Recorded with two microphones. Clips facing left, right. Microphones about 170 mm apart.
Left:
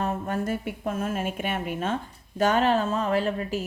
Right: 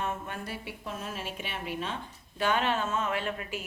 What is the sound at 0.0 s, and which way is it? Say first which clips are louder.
A woman's voice: left 8 dB; 40° left (ahead or behind).